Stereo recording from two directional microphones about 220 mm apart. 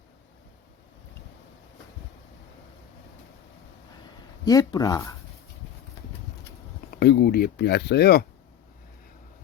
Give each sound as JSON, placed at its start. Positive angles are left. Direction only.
{"t": 4.4, "sound": "speech", "side_deg": 15}
{"t": 6.9, "sound": "speech", "side_deg": 50}